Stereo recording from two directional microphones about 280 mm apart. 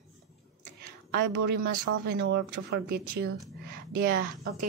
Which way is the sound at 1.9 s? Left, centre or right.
Right.